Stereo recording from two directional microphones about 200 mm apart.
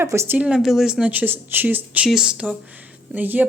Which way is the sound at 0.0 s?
10° right (ahead or behind).